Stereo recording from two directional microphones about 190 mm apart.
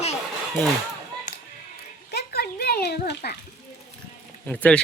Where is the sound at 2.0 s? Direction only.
55° left (ahead or behind).